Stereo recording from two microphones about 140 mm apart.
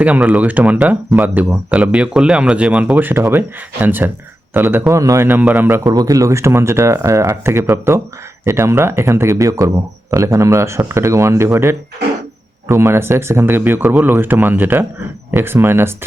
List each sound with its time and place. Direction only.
0.0 s speech: 10° right (ahead or behind)